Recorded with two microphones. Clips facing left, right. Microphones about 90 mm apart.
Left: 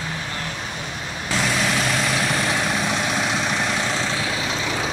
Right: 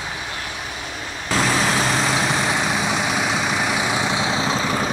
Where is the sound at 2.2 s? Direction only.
15° right (ahead or behind); by 4.9 s 35° right (ahead or behind).